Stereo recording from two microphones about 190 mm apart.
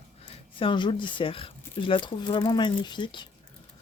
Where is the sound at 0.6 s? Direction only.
25° left (ahead or behind).